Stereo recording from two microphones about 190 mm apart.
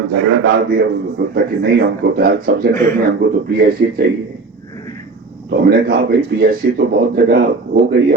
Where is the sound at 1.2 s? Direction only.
60° right (ahead or behind).